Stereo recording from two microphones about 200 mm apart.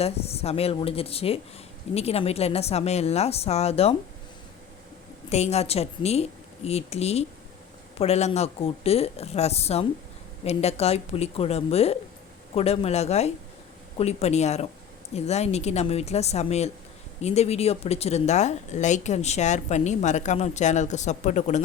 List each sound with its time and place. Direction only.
0.0 s a woman's voice: 30° left (ahead or behind)
5.3 s speech: 35° left (ahead or behind)